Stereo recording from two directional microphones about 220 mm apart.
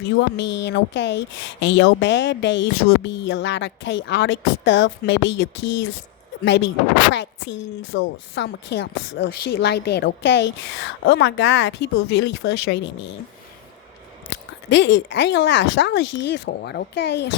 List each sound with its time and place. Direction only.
0.2 s a woman's voice: 55° left (ahead or behind)
14.7 s speech: 55° left (ahead or behind)